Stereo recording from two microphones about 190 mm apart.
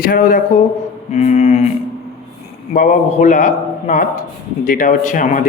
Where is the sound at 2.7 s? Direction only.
40° left (ahead or behind).